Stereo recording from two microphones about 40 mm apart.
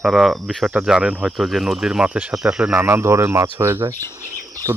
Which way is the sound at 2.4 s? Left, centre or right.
Right.